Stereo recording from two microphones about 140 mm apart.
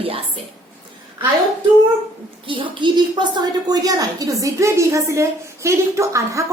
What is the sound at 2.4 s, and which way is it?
A woman's voice, 35° right (ahead or behind).